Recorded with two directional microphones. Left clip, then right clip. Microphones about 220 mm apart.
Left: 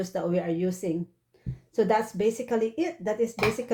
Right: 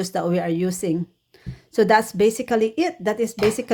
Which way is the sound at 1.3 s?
35° right (ahead or behind).